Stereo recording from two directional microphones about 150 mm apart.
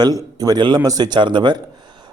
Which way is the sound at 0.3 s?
25° right (ahead or behind).